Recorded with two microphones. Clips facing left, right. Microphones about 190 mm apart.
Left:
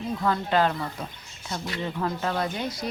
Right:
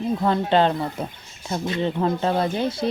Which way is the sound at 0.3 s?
25° right (ahead or behind).